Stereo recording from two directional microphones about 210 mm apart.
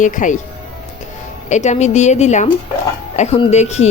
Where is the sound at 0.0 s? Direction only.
35° left (ahead or behind).